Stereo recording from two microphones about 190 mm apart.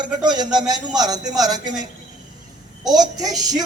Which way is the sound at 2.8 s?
20° right (ahead or behind).